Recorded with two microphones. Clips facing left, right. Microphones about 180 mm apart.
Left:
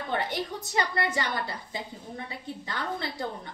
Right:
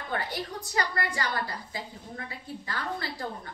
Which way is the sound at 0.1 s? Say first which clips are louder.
Left 2 dB; 25° left (ahead or behind).